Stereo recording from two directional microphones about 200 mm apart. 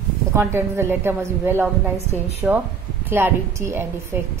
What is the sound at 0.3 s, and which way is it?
A woman's voice, 10° right (ahead or behind).